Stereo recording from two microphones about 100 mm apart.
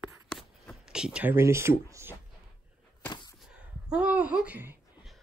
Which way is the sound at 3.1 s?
45° left (ahead or behind).